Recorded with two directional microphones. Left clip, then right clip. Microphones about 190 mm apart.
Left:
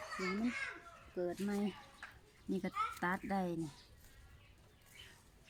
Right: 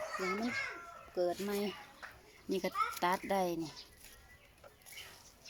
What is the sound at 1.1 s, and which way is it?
Speech, 15° left (ahead or behind).